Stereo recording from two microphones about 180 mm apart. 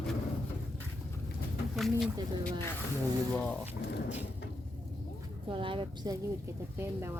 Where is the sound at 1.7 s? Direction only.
Centre (ahead or behind).